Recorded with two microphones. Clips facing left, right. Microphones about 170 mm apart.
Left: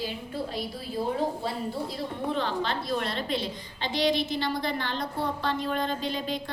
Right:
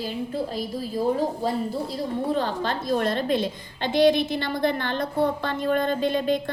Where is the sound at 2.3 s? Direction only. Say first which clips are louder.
Even; 45° right (ahead or behind).